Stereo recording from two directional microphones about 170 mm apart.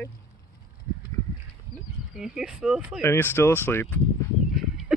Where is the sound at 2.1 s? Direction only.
5° right (ahead or behind).